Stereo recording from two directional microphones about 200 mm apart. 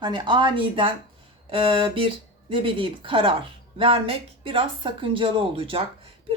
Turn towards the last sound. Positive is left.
turn(degrees=-25)  # may be behind; listen again after turning